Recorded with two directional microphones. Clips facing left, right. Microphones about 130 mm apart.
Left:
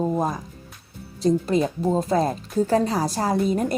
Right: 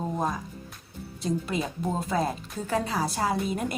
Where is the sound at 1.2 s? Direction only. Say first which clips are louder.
Left 9 dB; 35° left (ahead or behind).